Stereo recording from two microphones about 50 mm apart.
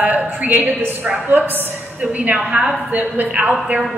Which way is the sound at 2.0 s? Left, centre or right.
Right.